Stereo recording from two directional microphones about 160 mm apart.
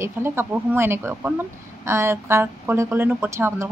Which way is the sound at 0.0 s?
15° right (ahead or behind).